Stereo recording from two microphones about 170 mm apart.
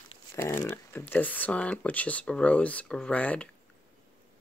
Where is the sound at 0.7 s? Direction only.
10° left (ahead or behind).